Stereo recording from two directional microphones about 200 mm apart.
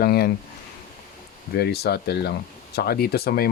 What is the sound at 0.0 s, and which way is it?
Speech, 50° left (ahead or behind).